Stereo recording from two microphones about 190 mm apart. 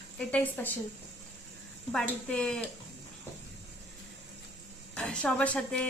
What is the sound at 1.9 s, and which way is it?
Speech, 5° left (ahead or behind).